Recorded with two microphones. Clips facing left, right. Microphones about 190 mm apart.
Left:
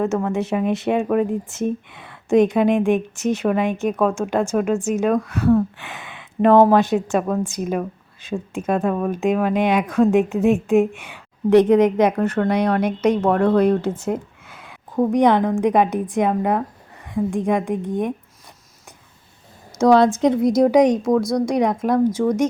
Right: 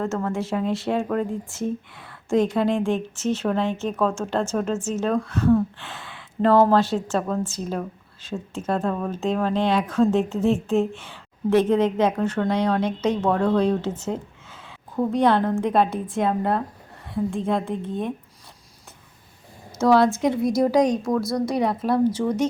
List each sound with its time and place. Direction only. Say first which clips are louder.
0.0 s speech: left 5 dB; 20° left (ahead or behind)
19.8 s speech: left 4 dB; 20° left (ahead or behind)
21.2 s a woman's voice: left 4 dB; centre (ahead or behind)
21.5 s speech: left 3 dB; 15° left (ahead or behind)
22.2 s a woman's voice: left 4 dB; centre (ahead or behind)